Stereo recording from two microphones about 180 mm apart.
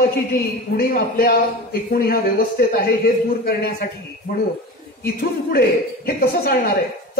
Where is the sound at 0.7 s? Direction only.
55° left (ahead or behind).